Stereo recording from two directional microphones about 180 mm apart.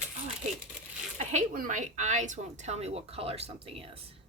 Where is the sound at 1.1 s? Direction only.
40° right (ahead or behind).